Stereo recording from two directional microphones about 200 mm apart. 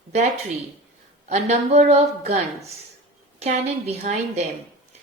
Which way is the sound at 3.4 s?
30° right (ahead or behind).